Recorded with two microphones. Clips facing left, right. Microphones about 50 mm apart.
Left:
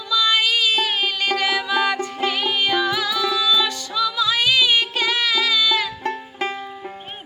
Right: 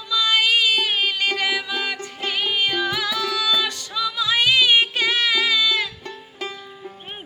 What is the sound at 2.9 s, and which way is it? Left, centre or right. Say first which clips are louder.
Music: left 2 dB; centre.